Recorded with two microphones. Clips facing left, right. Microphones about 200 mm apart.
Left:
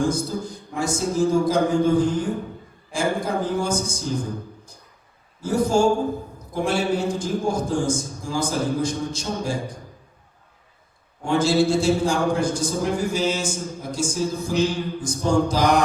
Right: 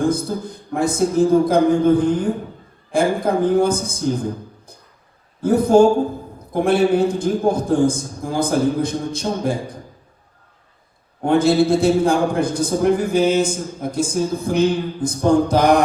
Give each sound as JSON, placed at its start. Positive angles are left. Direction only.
{"t": 0.0, "sound": "a man's voice", "side_deg": -55}
{"t": 5.4, "sound": "a man's voice", "side_deg": -55}
{"t": 11.2, "sound": "a man's voice", "side_deg": -55}